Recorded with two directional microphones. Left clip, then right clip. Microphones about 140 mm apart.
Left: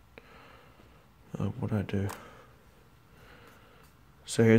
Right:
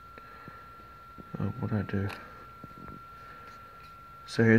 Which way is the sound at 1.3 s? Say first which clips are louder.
Even; 20° left (ahead or behind).